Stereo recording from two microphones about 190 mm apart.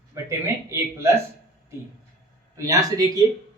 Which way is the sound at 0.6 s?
15° right (ahead or behind).